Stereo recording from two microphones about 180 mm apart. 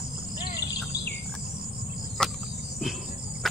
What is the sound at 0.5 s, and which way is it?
Bird vocalization, 65° left (ahead or behind).